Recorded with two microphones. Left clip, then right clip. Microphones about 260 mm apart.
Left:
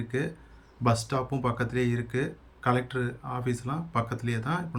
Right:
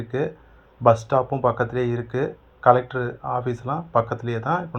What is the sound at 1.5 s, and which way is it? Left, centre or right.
Speech, centre.